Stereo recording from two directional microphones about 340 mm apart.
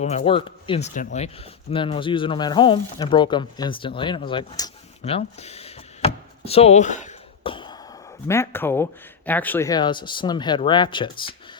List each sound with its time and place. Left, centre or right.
0.0 s speech: centre
6.4 s a sound: centre
8.3 s speech: centre